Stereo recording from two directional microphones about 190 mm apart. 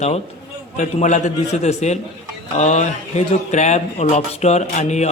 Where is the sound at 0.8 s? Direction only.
40° left (ahead or behind).